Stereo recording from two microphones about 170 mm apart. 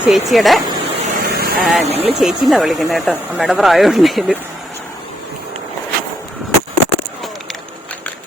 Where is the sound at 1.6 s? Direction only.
Centre (ahead or behind).